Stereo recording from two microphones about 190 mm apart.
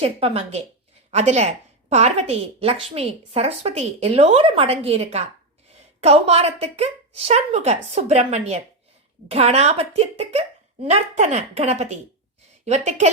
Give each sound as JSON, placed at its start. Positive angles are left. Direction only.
{"t": 0.0, "sound": "a woman's voice", "side_deg": -30}